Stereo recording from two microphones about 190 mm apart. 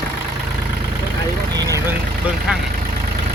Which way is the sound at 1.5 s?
15° right (ahead or behind).